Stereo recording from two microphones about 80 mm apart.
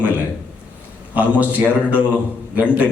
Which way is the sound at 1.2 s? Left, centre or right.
Centre.